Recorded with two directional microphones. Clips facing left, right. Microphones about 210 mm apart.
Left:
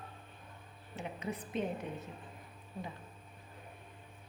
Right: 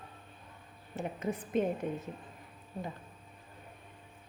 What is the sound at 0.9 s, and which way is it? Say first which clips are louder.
A woman's voice: right 5 dB; 50° right (ahead or behind).